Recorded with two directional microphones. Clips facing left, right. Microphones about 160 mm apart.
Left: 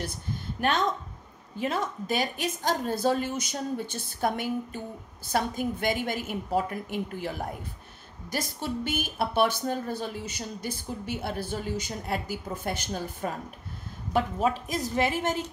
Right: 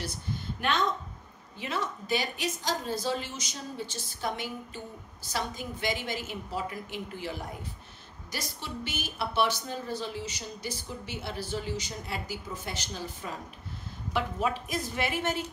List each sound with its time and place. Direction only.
0.6 s a woman's voice: 45° left (ahead or behind)
14.1 s a woman's voice: 40° left (ahead or behind)